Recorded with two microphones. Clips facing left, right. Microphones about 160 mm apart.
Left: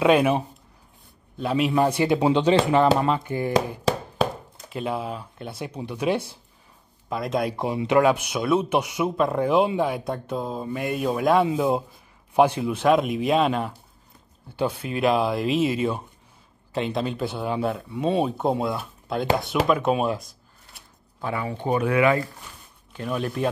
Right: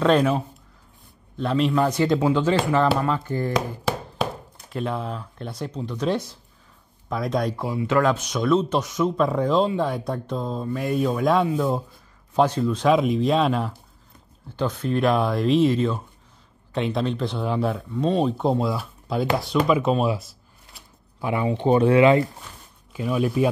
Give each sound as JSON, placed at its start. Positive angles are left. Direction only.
{"t": 0.0, "sound": "speech", "side_deg": 10}
{"t": 4.6, "sound": "speech", "side_deg": 5}
{"t": 7.5, "sound": "speech", "side_deg": 20}
{"t": 11.4, "sound": "speech", "side_deg": 15}
{"t": 21.2, "sound": "speech", "side_deg": -20}
{"t": 22.9, "sound": "speech", "side_deg": -5}